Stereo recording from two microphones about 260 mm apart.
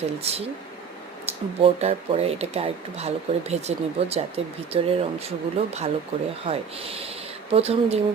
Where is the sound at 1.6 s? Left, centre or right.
Right.